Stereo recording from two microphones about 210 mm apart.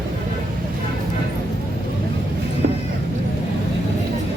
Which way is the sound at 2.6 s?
50° right (ahead or behind).